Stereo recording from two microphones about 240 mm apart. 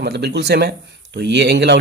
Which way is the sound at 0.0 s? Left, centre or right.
Right.